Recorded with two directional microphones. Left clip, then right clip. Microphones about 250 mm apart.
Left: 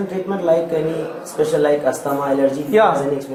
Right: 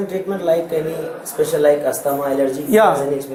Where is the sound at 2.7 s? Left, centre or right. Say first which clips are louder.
Right 1 dB; right.